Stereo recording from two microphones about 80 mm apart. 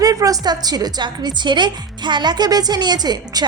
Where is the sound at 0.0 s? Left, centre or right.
Right.